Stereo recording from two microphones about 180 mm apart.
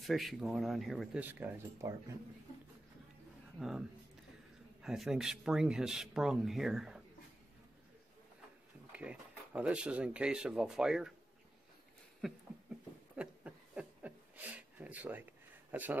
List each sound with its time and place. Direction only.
0.0 s speech: centre (ahead or behind)
3.5 s speech: 5° right (ahead or behind)
4.8 s speech: 5° right (ahead or behind)
8.9 s speech: 5° right (ahead or behind)
12.2 s speech: centre (ahead or behind)
13.1 s a sound: 5° right (ahead or behind)
15.7 s speech: 10° right (ahead or behind)